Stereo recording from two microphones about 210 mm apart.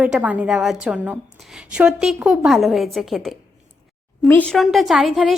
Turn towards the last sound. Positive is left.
turn(degrees=0)  # may be behind; listen again after turning